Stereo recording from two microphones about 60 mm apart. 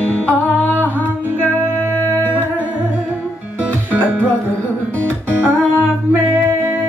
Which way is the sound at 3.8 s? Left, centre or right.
Right.